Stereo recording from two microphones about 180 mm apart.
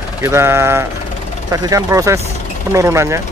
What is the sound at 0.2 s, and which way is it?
Speech, 15° right (ahead or behind).